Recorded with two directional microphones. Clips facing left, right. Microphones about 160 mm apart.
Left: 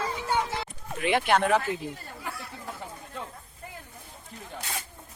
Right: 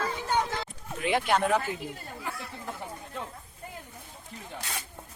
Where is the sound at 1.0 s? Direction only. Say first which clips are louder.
Left 2 dB; 75° left (ahead or behind).